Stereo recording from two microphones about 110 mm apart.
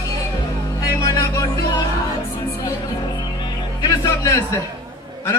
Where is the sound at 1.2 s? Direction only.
30° left (ahead or behind).